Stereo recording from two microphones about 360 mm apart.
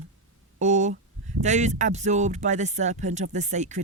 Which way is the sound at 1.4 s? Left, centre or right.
Centre.